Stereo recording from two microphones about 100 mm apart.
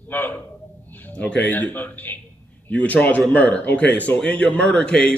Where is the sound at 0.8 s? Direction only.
20° left (ahead or behind).